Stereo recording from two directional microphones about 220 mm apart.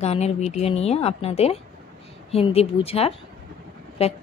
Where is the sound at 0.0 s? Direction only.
30° left (ahead or behind).